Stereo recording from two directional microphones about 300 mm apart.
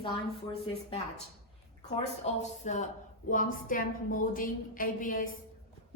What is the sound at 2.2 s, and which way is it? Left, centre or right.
A woman's voice, left.